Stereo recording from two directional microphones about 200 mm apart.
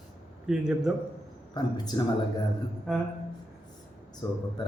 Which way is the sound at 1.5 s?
20° left (ahead or behind).